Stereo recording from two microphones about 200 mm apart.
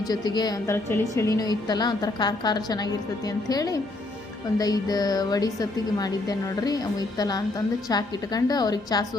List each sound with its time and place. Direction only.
0.1 s a woman's voice: 20° left (ahead or behind)